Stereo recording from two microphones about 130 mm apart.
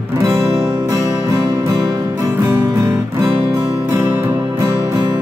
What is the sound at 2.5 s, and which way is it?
Music, 20° right (ahead or behind).